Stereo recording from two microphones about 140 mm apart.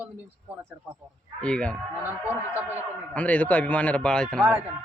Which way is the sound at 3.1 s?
10° left (ahead or behind).